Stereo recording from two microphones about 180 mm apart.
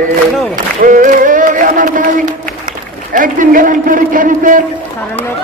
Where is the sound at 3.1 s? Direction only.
45° right (ahead or behind).